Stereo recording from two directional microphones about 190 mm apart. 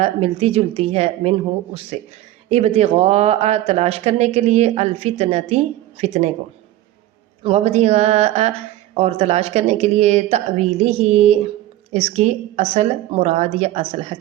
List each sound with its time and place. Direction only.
0.0 s speech: 30° right (ahead or behind)
2.5 s speech: 35° right (ahead or behind)
7.4 s speech: 35° right (ahead or behind)